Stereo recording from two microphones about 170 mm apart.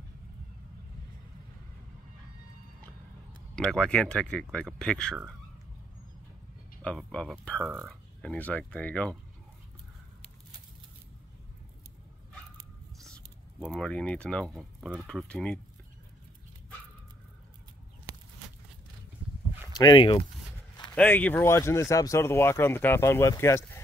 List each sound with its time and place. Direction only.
3.5 s speech: 5° left (ahead or behind)
6.8 s speech: 5° left (ahead or behind)
13.0 s speech: centre (ahead or behind)
19.8 s speech: 25° left (ahead or behind)
20.9 s speech: 10° left (ahead or behind)